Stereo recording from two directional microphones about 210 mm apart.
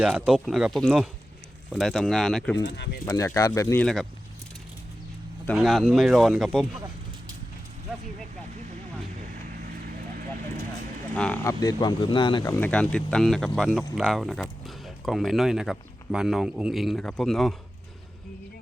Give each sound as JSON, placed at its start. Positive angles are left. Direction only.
{"t": 0.0, "sound": "speech", "side_deg": -5}
{"t": 2.6, "sound": "speech", "side_deg": 55}
{"t": 3.1, "sound": "speech", "side_deg": 15}
{"t": 5.5, "sound": "speech", "side_deg": 0}
{"t": 11.1, "sound": "speech", "side_deg": 5}
{"t": 11.6, "sound": "speech", "side_deg": 20}
{"t": 12.5, "sound": "speech", "side_deg": 5}